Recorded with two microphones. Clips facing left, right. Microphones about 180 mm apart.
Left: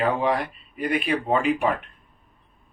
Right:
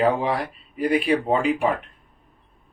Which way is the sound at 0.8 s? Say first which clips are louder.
Right 4 dB; 35° right (ahead or behind).